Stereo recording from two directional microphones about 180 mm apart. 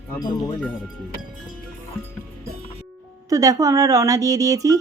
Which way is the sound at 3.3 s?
20° right (ahead or behind).